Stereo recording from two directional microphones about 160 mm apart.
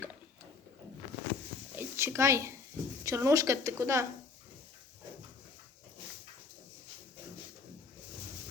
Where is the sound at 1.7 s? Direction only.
15° right (ahead or behind).